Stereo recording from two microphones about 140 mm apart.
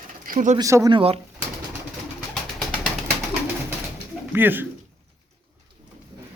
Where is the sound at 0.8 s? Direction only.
40° right (ahead or behind).